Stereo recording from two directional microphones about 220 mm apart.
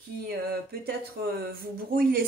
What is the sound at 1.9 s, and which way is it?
Speech, 40° right (ahead or behind).